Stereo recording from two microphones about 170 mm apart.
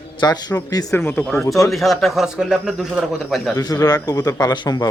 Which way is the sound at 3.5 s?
20° left (ahead or behind).